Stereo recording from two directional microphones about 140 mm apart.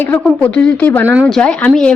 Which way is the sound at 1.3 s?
10° left (ahead or behind).